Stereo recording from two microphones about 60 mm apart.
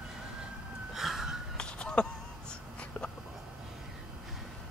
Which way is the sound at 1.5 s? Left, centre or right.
Centre.